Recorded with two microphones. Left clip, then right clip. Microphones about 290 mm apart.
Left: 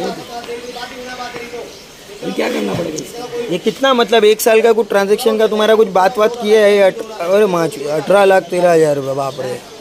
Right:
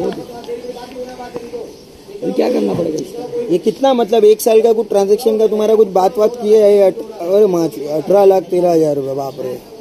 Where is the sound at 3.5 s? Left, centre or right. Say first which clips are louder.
Even; left.